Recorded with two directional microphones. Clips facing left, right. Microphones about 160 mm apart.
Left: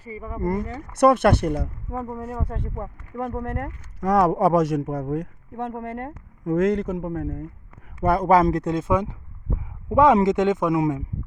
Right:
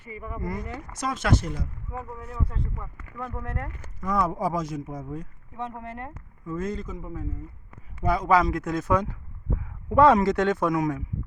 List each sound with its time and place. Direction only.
0.0 s speech: 30° left (ahead or behind)
0.3 s speech: 50° left (ahead or behind)
0.9 s speech: 60° left (ahead or behind)
4.0 s speech: 80° left
5.5 s speech: 55° left (ahead or behind)
6.4 s speech: 85° left
8.0 s speech: 55° left (ahead or behind)
8.6 s speech: 25° left (ahead or behind)